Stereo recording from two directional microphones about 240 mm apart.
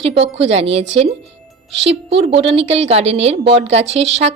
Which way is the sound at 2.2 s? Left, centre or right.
Right.